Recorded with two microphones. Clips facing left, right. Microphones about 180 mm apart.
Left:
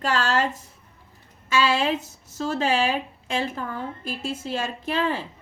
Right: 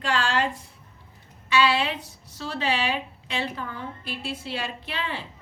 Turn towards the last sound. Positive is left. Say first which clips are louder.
# left 7 dB
turn(degrees=45)  # may be behind; listen again after turning